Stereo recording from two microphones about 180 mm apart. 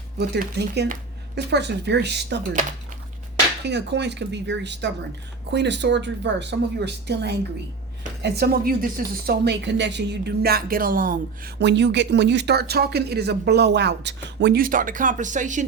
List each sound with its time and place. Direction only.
0.2 s speech: 70° right (ahead or behind)
3.6 s speech: 70° right (ahead or behind); by 11.5 s 50° right (ahead or behind)
11.6 s speech: 75° right (ahead or behind)
14.6 s speech: 50° right (ahead or behind)